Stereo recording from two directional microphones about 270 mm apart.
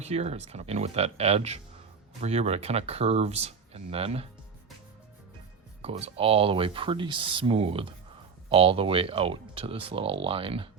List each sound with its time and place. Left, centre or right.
0.0 s speech: right
5.8 s speech: right